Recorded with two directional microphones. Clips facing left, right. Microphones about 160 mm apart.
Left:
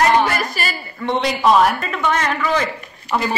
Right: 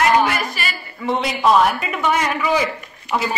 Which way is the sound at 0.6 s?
40° left (ahead or behind).